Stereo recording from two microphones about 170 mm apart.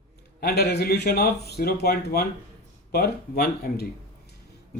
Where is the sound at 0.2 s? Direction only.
70° left (ahead or behind).